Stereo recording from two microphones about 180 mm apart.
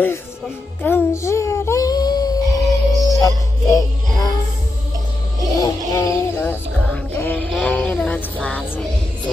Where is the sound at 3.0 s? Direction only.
20° left (ahead or behind).